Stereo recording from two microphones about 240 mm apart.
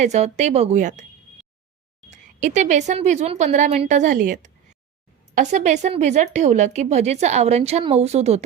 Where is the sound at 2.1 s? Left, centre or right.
Right.